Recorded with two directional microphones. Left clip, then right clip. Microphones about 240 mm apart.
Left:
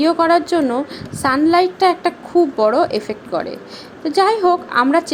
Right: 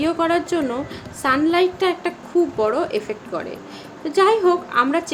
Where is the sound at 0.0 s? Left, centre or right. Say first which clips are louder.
Left 6 dB; centre.